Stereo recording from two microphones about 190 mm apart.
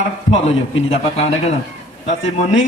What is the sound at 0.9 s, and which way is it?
Speech, 35° left (ahead or behind).